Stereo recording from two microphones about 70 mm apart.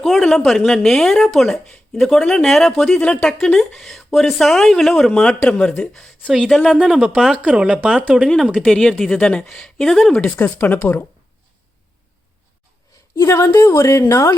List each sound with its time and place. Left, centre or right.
0.0 s speech: centre
6.3 s speech: centre
8.5 s speech: centre
10.3 s speech: left
13.1 s a woman's voice: left